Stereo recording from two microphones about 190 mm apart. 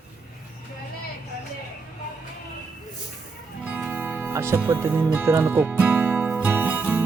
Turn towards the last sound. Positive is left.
turn(degrees=-10)  # may be behind; listen again after turning